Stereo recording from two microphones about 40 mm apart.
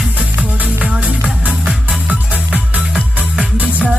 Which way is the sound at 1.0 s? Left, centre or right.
Right.